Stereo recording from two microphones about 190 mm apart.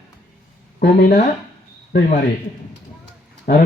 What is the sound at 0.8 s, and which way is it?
Speech, 55° left (ahead or behind).